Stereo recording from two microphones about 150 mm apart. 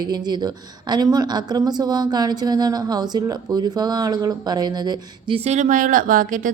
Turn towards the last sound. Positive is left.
turn(degrees=-65)  # may be behind; listen again after turning